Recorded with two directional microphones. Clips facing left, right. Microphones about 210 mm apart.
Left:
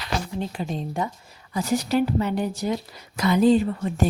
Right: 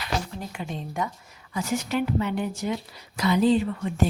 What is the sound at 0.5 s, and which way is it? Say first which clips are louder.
A woman's voice: left 4 dB; 35° left (ahead or behind).